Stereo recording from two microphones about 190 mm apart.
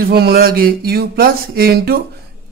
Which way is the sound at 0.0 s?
55° right (ahead or behind).